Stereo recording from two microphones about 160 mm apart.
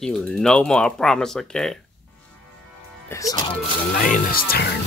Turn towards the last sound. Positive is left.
turn(degrees=70)  # may be behind; listen again after turning